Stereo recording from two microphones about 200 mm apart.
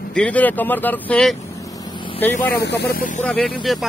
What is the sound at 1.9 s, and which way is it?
Vehicle, 25° left (ahead or behind).